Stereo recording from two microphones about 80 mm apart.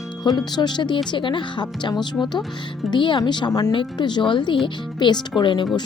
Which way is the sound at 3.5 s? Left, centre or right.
Left.